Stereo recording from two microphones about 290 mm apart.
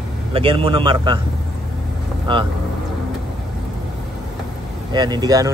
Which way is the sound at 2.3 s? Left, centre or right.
Centre.